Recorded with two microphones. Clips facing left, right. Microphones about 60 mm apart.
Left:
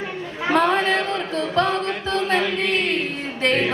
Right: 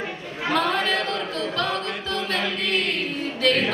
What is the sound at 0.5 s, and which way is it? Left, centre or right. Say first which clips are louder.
Music: left 4 dB; left.